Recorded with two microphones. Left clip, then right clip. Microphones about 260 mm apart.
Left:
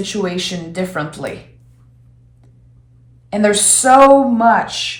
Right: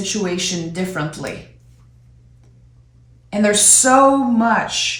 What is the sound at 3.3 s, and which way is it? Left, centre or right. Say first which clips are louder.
Speech: left 1 dB; centre.